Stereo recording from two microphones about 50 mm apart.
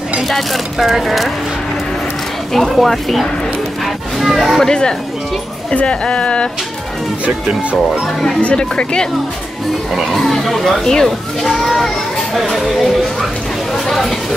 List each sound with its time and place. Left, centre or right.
0.3 s speech: centre
2.5 s speech: centre
3.8 s music: centre
4.6 s speech: centre
8.4 s speech: left
9.9 s speech: centre